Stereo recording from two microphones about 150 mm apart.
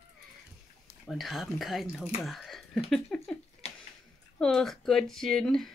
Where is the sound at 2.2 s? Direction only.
Centre (ahead or behind).